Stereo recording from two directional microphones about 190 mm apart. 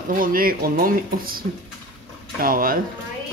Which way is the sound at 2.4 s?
50° right (ahead or behind).